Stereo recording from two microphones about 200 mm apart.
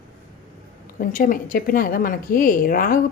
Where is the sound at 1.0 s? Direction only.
40° left (ahead or behind).